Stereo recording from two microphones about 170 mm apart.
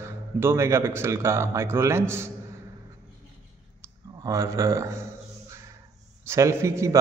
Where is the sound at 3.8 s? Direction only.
15° right (ahead or behind).